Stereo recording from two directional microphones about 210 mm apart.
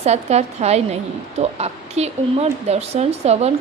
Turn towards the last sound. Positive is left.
turn(degrees=-30)  # may be behind; listen again after turning